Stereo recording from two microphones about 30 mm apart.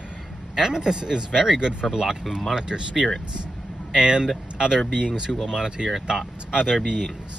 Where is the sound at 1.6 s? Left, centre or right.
Right.